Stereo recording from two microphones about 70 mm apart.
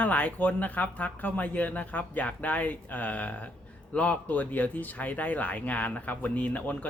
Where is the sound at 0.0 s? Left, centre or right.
Left.